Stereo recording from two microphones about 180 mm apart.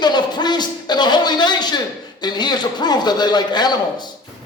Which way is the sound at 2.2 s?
25° left (ahead or behind).